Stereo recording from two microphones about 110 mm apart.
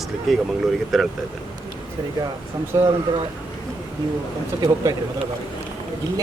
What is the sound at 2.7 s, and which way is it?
Speech, 30° right (ahead or behind).